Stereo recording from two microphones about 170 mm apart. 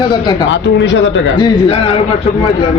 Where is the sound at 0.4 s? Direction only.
90° left.